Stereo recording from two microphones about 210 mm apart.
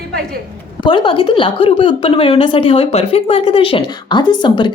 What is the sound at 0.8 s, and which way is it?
A woman's voice, 25° left (ahead or behind).